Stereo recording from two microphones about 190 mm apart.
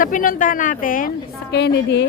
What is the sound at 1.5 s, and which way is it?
Speech, 65° left (ahead or behind).